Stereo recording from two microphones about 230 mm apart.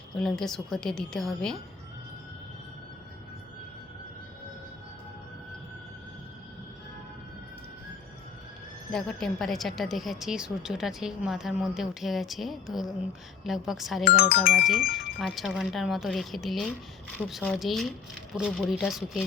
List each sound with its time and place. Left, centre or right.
0.1 s a woman's voice: centre
8.9 s a woman's voice: centre
14.0 s speech: left
15.2 s a woman's voice: centre